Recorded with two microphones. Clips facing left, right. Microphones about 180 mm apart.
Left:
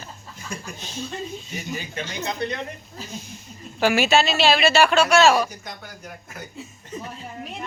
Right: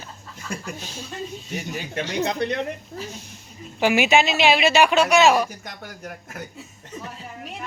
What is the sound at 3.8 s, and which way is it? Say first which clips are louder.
Speech: right 1 dB; 15° right (ahead or behind).